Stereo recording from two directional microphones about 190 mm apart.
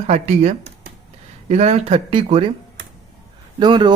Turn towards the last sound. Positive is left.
turn(degrees=-25)  # may be behind; listen again after turning